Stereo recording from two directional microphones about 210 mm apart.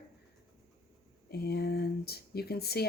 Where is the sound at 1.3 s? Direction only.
50° left (ahead or behind).